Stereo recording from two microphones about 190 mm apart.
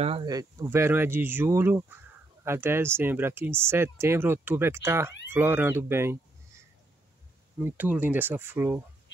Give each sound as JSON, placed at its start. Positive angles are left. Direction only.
{"t": 0.0, "sound": "speech", "side_deg": -30}
{"t": 0.3, "sound": "speech", "side_deg": -20}
{"t": 7.6, "sound": "speech", "side_deg": -10}